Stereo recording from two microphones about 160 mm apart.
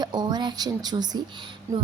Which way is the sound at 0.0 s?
25° right (ahead or behind).